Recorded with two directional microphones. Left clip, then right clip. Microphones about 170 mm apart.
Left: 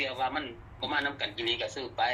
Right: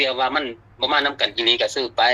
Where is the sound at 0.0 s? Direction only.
90° right.